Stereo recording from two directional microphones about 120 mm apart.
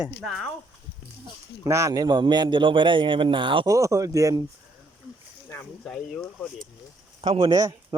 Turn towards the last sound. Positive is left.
turn(degrees=-40)  # may be behind; listen again after turning